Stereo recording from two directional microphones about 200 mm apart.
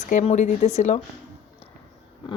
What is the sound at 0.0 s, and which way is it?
Speech, 35° left (ahead or behind).